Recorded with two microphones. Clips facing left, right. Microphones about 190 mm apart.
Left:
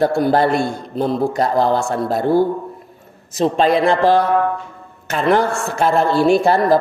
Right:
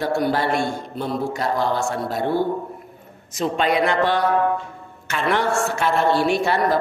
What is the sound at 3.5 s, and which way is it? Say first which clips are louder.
Speech: left 4 dB; 35° left (ahead or behind).